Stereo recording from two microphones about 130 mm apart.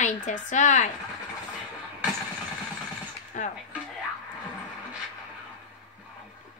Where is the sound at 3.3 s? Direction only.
70° left (ahead or behind).